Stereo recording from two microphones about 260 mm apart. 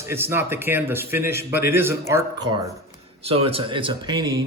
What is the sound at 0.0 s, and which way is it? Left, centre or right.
A man's voice, centre.